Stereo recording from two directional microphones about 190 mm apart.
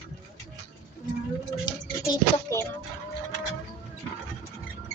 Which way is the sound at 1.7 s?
20° left (ahead or behind).